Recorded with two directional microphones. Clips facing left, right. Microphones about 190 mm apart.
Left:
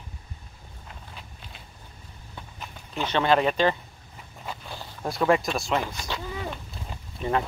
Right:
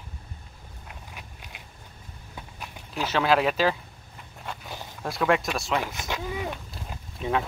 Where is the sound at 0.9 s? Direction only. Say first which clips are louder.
Even; 10° right (ahead or behind).